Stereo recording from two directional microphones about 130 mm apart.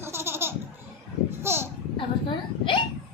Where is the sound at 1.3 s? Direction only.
20° right (ahead or behind).